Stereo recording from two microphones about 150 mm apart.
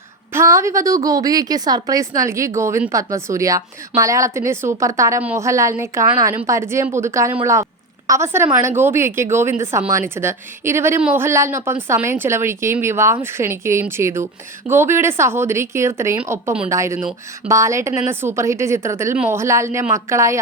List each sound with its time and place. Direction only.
0.3 s a woman's voice: 20° right (ahead or behind)
19.1 s a woman's voice: 5° right (ahead or behind)
19.4 s speech: 20° right (ahead or behind)